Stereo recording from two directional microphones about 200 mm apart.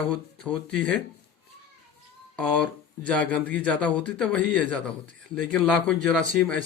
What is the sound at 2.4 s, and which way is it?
Speech, 5° left (ahead or behind).